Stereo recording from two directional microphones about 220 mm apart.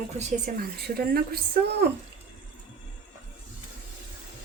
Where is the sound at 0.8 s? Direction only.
45° right (ahead or behind).